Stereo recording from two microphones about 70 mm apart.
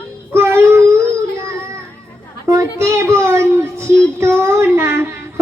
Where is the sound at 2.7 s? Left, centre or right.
Right.